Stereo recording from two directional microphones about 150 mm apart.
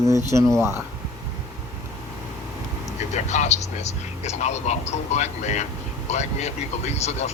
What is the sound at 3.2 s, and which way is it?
Speech, 50° left (ahead or behind).